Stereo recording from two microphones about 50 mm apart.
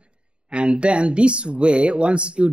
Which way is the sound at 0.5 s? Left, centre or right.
Right.